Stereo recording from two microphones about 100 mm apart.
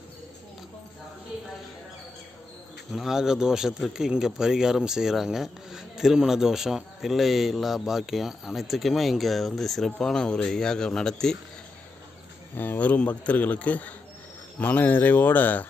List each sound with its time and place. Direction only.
2.9 s speech: 5° right (ahead or behind)
12.5 s speech: 20° left (ahead or behind)